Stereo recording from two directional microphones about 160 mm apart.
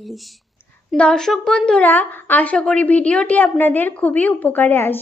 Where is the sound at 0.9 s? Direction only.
5° left (ahead or behind).